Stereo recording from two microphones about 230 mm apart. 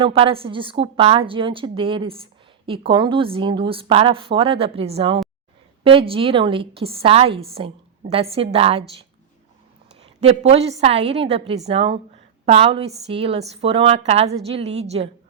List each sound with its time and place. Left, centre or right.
0.0 s a woman's voice: right
10.0 s a woman's voice: right